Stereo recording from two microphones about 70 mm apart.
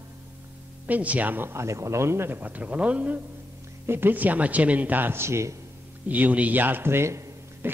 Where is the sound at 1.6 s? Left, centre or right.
Right.